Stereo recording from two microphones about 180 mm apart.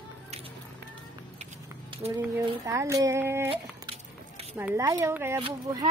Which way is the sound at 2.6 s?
15° right (ahead or behind).